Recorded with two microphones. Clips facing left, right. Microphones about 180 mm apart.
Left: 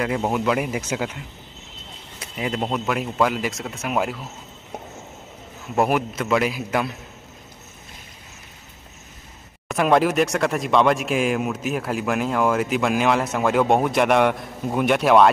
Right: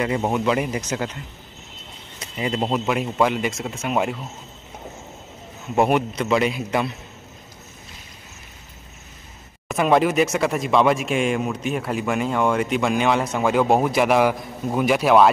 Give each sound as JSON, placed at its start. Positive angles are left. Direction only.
{"t": 0.0, "sound": "speech", "side_deg": 0}
{"t": 5.8, "sound": "speech", "side_deg": 5}
{"t": 9.7, "sound": "speech", "side_deg": 0}